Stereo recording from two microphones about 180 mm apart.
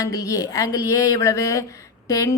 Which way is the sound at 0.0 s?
20° left (ahead or behind).